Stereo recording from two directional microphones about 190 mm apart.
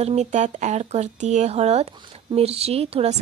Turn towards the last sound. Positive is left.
turn(degrees=-30)  # may be behind; listen again after turning